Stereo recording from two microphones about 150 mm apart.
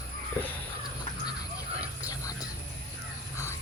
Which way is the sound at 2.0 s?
25° left (ahead or behind).